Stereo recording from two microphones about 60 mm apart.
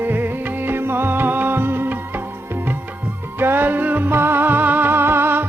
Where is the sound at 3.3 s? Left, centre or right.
Right.